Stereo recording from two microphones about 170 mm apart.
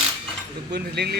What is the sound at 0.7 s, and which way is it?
Speech, 75° right (ahead or behind).